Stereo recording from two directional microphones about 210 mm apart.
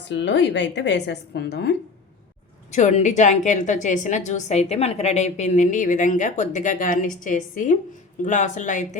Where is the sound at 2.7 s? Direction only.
35° left (ahead or behind).